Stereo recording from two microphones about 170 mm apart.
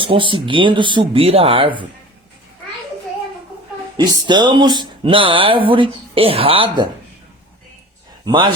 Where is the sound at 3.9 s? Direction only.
25° right (ahead or behind).